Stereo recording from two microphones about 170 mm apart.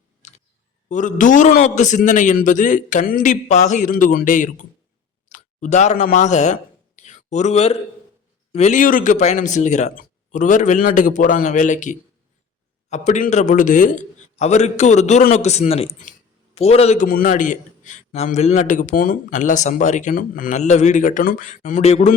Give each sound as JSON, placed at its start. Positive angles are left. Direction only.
{"t": 0.2, "sound": "clicking", "side_deg": 45}
{"t": 0.9, "sound": "a man's voice", "side_deg": 45}
{"t": 17.1, "sound": "a man's voice", "side_deg": 55}